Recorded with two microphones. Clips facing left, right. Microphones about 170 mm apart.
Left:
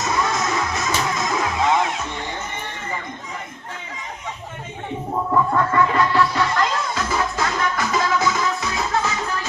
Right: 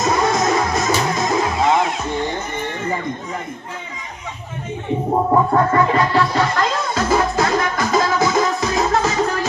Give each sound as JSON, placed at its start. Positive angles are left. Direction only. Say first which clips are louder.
{"t": 0.0, "sound": "music", "louder": "right 5 dB", "side_deg": -35}
{"t": 5.1, "sound": "music", "louder": "right 4 dB", "side_deg": -40}